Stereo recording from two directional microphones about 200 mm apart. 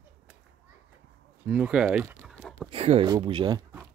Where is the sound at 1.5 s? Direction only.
5° right (ahead or behind).